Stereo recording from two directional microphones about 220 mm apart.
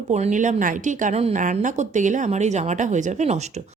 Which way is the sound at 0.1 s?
35° right (ahead or behind).